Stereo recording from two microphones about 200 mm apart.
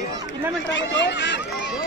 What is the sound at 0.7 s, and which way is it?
Run, 65° left (ahead or behind).